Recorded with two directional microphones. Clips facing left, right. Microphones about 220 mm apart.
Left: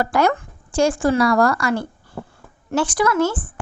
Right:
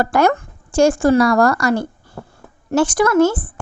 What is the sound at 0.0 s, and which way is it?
A woman's voice, 50° right (ahead or behind).